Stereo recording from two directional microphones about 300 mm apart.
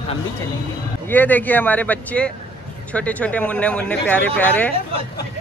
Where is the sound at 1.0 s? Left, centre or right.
Centre.